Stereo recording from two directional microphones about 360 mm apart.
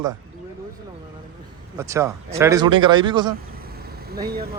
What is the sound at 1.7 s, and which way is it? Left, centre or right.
Speech, centre.